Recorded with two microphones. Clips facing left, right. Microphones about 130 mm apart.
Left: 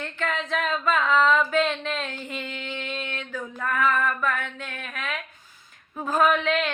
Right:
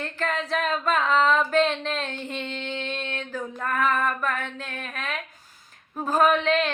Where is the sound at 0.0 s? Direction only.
35° right (ahead or behind).